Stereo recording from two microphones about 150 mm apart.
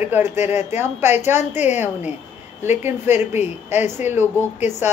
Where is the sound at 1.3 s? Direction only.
50° left (ahead or behind).